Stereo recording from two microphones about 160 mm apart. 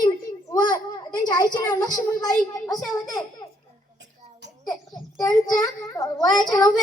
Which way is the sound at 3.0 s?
25° left (ahead or behind).